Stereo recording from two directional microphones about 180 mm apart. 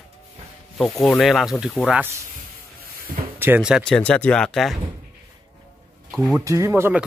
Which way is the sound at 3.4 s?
5° right (ahead or behind).